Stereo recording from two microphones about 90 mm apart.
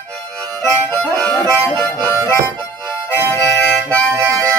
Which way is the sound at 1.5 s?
30° left (ahead or behind).